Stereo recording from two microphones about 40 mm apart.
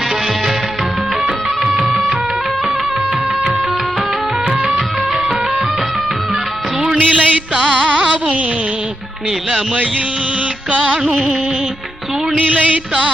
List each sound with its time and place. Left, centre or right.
1.6 s music: centre
5.1 s music: centre
7.0 s music: right
10.8 s music: centre
12.4 s a sound: right